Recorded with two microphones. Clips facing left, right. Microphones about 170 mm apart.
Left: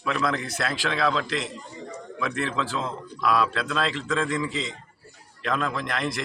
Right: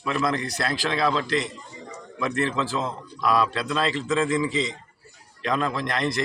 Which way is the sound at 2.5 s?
5° right (ahead or behind).